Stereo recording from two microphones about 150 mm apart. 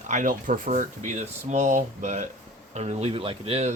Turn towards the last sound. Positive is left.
turn(degrees=-40)  # may be behind; listen again after turning